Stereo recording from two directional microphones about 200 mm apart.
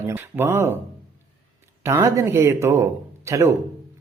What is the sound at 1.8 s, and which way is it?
Speech, 10° right (ahead or behind).